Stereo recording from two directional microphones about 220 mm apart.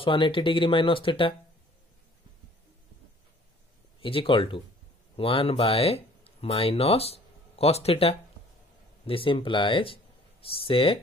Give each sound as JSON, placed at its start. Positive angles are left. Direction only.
{"t": 0.0, "sound": "speech", "side_deg": 25}
{"t": 4.0, "sound": "speech", "side_deg": 25}